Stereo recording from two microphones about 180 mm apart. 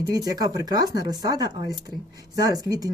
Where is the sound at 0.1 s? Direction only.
20° right (ahead or behind).